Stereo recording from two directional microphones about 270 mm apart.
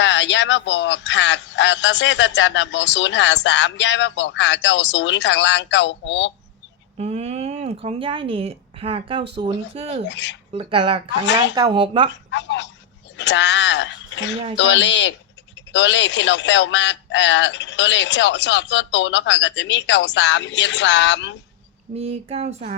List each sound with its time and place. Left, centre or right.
0.0 s a man's voice: left
7.0 s speech: right
10.1 s a man's voice: left
10.5 s speech: right
11.2 s a man's voice: left
11.5 s speech: centre
12.3 s a man's voice: left
21.9 s speech: right